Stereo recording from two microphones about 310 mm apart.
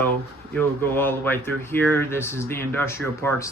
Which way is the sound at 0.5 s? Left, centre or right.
Centre.